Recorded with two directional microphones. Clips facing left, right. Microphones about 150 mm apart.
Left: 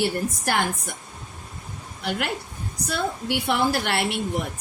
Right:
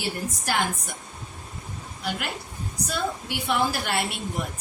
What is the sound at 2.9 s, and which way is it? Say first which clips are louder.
A woman's voice: left 4 dB; 60° left (ahead or behind).